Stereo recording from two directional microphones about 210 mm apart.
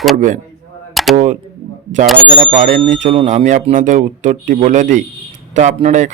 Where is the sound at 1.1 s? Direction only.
35° right (ahead or behind).